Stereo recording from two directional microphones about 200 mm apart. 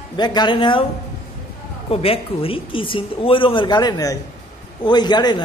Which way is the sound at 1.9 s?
30° left (ahead or behind).